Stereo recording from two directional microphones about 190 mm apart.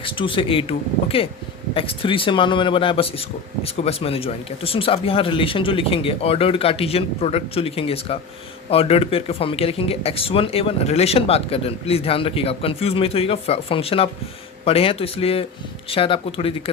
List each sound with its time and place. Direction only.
0.0 s speech: 25° left (ahead or behind)